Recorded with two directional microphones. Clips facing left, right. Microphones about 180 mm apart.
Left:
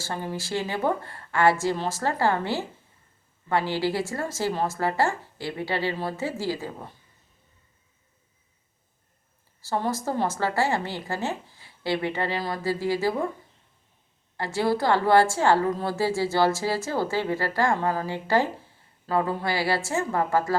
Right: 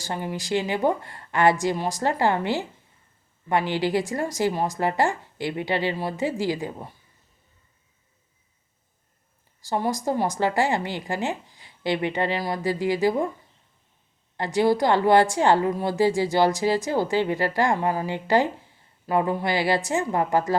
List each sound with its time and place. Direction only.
0.0 s speech: 15° right (ahead or behind)
9.6 s speech: 15° right (ahead or behind)
14.3 s a woman's voice: 20° right (ahead or behind)